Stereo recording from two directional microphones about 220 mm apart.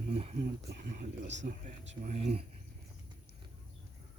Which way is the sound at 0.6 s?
50° right (ahead or behind).